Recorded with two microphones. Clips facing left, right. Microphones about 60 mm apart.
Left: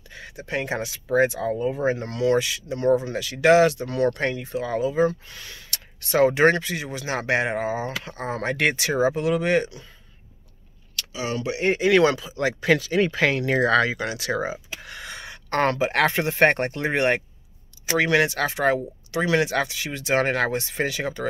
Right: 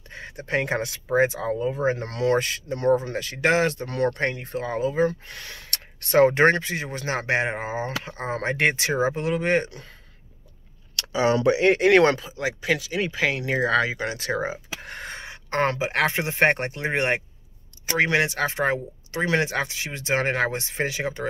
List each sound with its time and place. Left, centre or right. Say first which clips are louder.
0.5 s speech: right 2 dB; right
1.6 s speech: even; centre
2.0 s speech: left 1 dB; right
6.5 s speech: even; right
11.6 s speech: even; right
12.4 s speech: left 4 dB; centre
13.4 s speech: left 2 dB; centre
14.0 s speech: even; right
15.5 s speech: left 2 dB; centre